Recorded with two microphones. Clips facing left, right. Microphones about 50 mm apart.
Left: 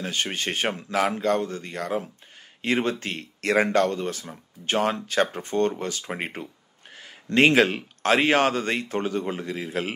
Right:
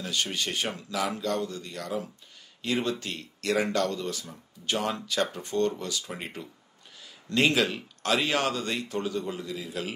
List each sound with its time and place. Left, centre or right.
0.0 s a man's voice: left